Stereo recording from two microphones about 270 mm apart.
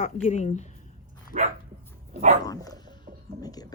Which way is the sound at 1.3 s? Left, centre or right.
Right.